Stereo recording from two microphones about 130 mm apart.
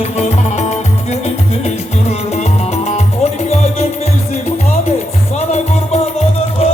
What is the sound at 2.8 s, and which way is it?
Music, 55° left (ahead or behind).